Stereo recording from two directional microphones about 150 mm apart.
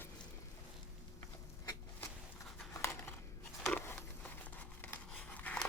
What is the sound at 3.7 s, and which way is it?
Crumpling, 10° left (ahead or behind).